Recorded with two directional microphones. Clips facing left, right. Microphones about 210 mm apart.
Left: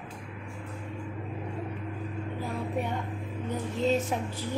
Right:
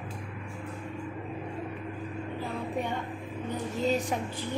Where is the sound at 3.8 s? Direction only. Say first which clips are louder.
Left 1 dB; centre (ahead or behind).